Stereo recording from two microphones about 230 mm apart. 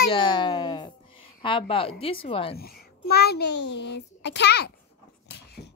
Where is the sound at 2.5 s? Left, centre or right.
Left.